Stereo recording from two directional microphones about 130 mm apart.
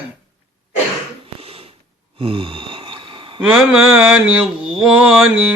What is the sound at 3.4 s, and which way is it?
Mantra, 15° right (ahead or behind).